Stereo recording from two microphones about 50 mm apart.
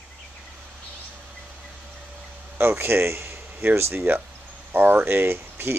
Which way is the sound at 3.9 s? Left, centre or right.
Right.